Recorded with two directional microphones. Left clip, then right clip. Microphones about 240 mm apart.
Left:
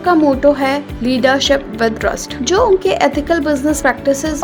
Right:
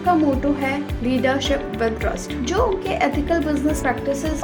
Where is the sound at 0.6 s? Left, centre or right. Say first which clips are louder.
Left 7 dB; left.